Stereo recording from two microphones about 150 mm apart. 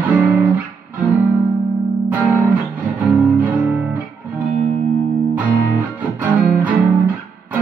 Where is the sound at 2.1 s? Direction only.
10° right (ahead or behind).